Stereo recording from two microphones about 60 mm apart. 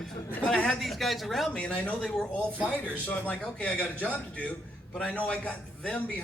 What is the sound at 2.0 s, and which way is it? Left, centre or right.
A man's voice, centre.